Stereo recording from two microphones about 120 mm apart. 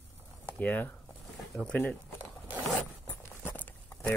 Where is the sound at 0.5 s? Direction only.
15° left (ahead or behind).